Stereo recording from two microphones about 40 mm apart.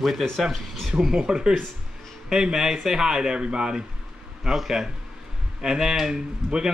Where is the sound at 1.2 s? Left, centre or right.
Centre.